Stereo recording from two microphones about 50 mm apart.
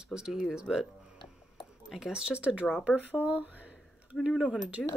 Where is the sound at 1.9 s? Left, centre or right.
Centre; by 3.1 s right.